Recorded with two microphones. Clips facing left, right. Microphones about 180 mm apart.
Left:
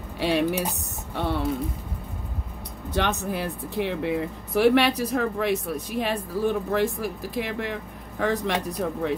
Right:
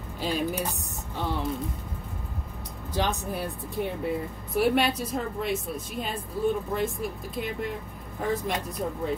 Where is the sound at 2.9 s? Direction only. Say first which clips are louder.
Left 3 dB; 70° left (ahead or behind).